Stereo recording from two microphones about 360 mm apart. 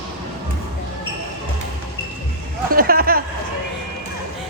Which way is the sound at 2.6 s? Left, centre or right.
Right.